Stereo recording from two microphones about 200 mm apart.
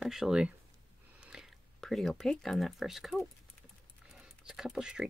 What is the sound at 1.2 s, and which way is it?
Speech, 5° right (ahead or behind).